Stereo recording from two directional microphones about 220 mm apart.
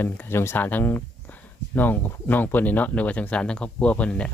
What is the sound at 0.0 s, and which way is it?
Speech, 10° left (ahead or behind).